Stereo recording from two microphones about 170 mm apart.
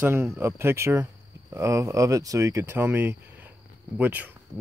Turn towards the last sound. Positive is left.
turn(degrees=-10)  # may be behind; listen again after turning